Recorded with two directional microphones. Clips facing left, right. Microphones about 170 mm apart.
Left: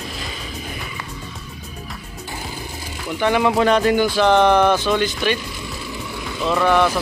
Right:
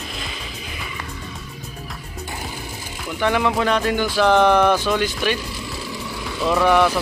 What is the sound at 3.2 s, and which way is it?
Speech, centre (ahead or behind).